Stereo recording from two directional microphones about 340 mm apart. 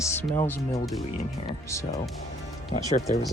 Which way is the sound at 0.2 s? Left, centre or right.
Centre.